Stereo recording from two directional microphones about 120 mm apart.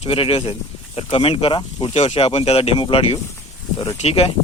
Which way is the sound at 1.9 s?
60° left (ahead or behind).